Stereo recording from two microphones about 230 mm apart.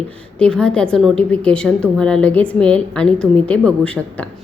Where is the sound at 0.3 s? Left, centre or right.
Centre.